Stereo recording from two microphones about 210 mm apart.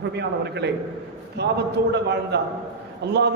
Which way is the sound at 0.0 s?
55° right (ahead or behind).